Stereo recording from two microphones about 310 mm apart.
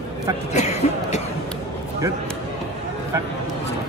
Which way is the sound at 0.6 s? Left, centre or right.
Left.